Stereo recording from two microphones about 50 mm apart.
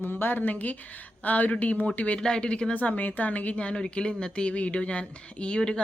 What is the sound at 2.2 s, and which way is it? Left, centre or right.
Speech, centre.